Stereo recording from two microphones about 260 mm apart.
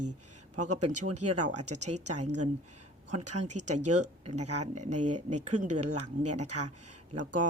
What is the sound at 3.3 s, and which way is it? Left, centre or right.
A woman's voice, right.